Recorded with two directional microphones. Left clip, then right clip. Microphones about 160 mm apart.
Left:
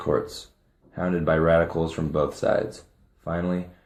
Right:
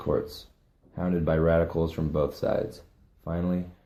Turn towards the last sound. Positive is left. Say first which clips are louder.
# left 4 dB
turn(degrees=-15)  # may be behind; listen again after turning